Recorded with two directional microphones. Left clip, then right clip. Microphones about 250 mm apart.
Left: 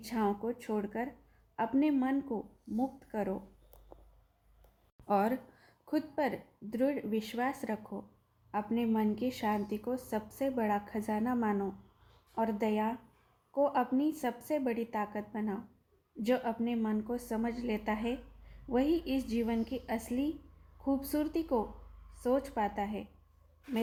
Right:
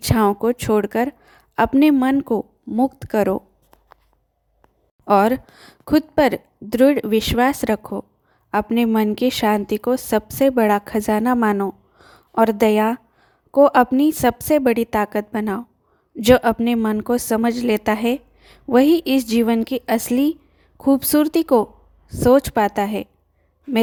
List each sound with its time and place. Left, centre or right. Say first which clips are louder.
0.0 s a woman's voice: right 16 dB; right
5.0 s a woman's voice: right 15 dB; right